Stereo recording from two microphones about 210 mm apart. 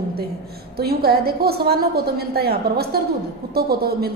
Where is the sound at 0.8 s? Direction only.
45° right (ahead or behind).